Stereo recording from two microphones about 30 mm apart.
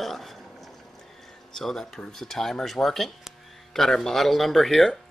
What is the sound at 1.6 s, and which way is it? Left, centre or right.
Speech, centre.